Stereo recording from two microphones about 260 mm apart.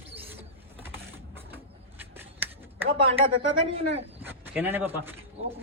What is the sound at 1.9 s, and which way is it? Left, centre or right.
Finger snapping, centre.